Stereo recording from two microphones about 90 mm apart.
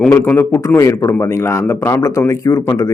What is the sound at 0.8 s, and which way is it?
Speech, 35° left (ahead or behind).